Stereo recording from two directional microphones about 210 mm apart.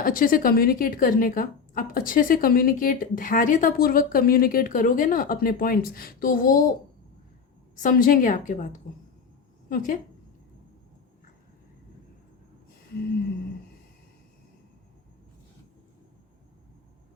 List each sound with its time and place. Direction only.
0.0 s a woman's voice: 40° left (ahead or behind)
7.8 s a woman's voice: 40° left (ahead or behind)